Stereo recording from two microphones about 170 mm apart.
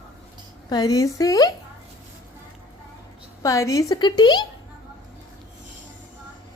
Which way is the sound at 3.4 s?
20° left (ahead or behind).